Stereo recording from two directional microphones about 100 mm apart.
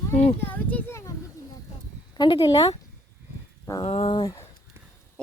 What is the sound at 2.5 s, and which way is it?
Speech, 35° left (ahead or behind).